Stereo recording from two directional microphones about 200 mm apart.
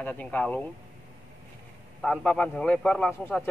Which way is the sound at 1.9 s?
5° left (ahead or behind).